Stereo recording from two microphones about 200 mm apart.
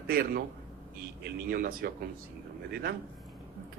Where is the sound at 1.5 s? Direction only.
50° right (ahead or behind).